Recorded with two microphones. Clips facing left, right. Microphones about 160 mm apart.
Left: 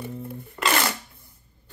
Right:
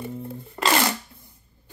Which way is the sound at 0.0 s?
25° right (ahead or behind).